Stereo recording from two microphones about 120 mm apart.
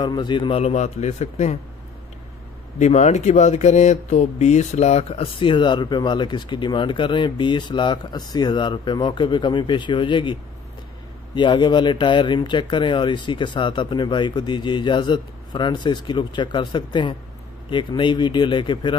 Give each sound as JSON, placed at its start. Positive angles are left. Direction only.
{"t": 0.0, "sound": "speech", "side_deg": 40}
{"t": 0.6, "sound": "a man's voice", "side_deg": 60}
{"t": 2.8, "sound": "speech", "side_deg": 70}
{"t": 11.3, "sound": "speech", "side_deg": 40}